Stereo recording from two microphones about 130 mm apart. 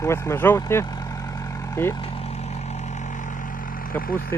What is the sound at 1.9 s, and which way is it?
Vehicle, 45° left (ahead or behind).